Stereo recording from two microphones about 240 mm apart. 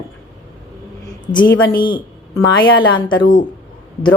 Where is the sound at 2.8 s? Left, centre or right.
Centre.